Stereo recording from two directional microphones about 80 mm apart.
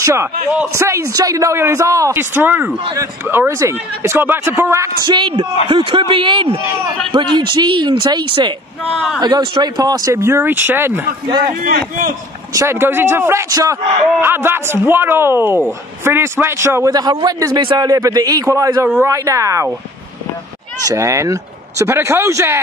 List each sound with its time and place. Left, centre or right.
0.0 s a man's voice: right
2.1 s speech: right
5.0 s a man's voice: right
7.2 s speech: right
8.9 s speech: centre
9.2 s a man's voice: right
10.1 s speech: right
11.2 s speech: right
12.5 s speech: right
13.5 s a man's voice: right
14.2 s speech: right
16.9 s a man's voice: right
20.9 s speech: right